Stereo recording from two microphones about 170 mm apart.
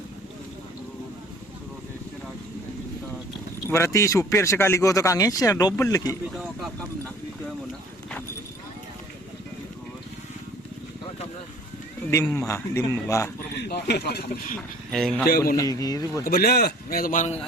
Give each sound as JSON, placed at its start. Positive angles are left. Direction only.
{"t": 3.7, "sound": "speech", "side_deg": 15}
{"t": 12.3, "sound": "speech", "side_deg": 15}
{"t": 13.6, "sound": "speech", "side_deg": 75}
{"t": 14.8, "sound": "a man's voice", "side_deg": 0}
{"t": 15.5, "sound": "a man's voice", "side_deg": 20}
{"t": 16.2, "sound": "a man's voice", "side_deg": 65}